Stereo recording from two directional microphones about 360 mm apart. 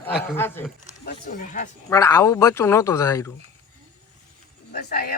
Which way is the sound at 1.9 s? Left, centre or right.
Centre.